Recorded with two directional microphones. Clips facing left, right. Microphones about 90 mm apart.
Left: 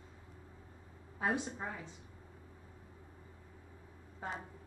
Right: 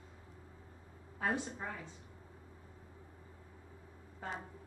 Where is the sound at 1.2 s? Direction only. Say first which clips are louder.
Left 1 dB; 15° left (ahead or behind).